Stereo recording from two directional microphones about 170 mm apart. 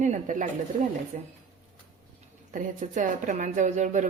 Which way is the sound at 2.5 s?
50° right (ahead or behind).